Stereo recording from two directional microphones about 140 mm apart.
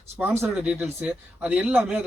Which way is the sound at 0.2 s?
15° right (ahead or behind).